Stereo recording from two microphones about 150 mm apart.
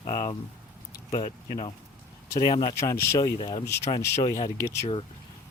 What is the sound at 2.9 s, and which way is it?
Speech, 25° left (ahead or behind).